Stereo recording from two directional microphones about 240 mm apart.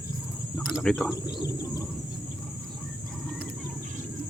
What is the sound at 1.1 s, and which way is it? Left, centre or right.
Speech, centre.